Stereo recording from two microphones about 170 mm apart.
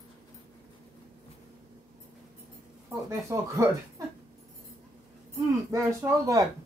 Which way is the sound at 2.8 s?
20° right (ahead or behind).